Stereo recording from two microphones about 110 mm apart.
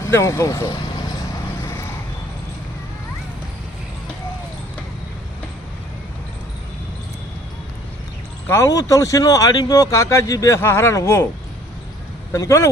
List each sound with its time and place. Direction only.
0.0 s speech: 25° left (ahead or behind)
8.4 s speech: 25° left (ahead or behind)
12.3 s speech: 25° left (ahead or behind)